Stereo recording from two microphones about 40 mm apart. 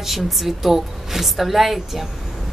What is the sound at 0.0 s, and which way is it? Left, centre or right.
A woman's voice, centre.